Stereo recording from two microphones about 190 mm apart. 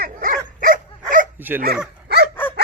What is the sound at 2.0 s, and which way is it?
Dog, 55° right (ahead or behind).